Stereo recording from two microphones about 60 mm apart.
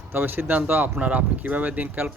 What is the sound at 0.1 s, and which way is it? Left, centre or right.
Speech, right.